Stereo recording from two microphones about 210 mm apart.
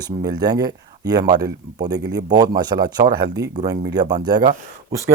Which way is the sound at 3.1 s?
50° right (ahead or behind).